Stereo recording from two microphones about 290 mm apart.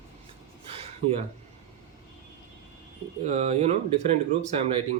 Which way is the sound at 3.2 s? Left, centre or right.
Right.